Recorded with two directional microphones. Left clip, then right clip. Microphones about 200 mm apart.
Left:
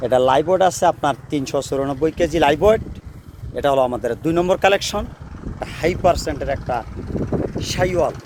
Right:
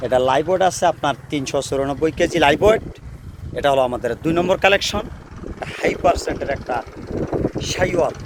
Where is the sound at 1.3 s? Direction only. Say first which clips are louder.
Even; 30° left (ahead or behind); by 5.1 s 45° left (ahead or behind).